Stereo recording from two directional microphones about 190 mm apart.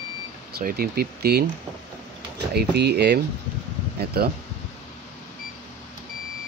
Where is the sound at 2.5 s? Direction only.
60° right (ahead or behind).